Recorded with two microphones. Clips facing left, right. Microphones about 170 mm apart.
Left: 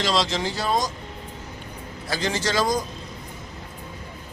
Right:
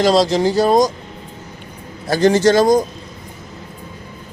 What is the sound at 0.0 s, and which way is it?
Speech, 40° right (ahead or behind).